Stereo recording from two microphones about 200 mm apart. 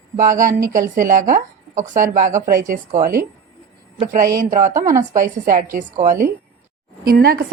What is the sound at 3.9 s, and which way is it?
A woman's voice, 40° right (ahead or behind).